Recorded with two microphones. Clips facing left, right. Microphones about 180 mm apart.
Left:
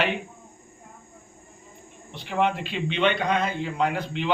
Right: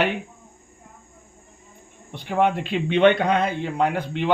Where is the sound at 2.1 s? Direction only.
50° right (ahead or behind).